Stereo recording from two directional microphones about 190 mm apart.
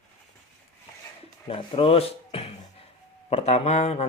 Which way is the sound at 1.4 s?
30° left (ahead or behind).